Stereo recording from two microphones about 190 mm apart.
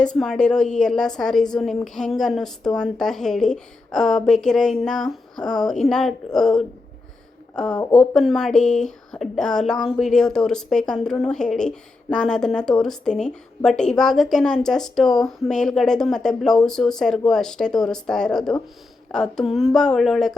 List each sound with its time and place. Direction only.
0.0 s a woman's voice: 5° left (ahead or behind)
7.7 s speech: 20° left (ahead or behind)
7.9 s a woman's voice: centre (ahead or behind)